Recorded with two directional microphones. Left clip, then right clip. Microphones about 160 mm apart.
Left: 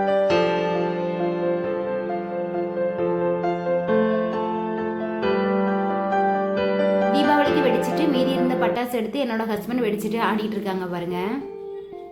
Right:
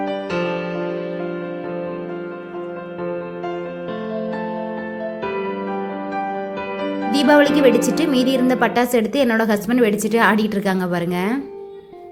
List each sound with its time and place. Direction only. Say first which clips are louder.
7.1 s a woman's voice: right 4 dB; 35° right (ahead or behind)